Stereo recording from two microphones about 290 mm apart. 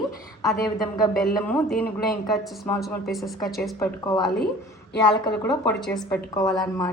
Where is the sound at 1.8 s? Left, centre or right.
Centre.